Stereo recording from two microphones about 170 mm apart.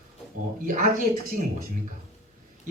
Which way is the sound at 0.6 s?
50° right (ahead or behind).